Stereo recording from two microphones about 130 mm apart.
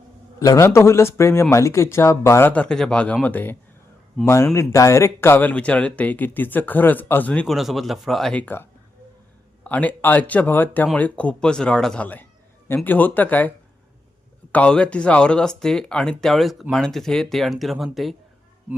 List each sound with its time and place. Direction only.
0.3 s speech: 25° left (ahead or behind)
2.5 s speech: 10° left (ahead or behind)
7.5 s speech: centre (ahead or behind)
9.6 s speech: 10° left (ahead or behind)
14.5 s speech: 10° left (ahead or behind)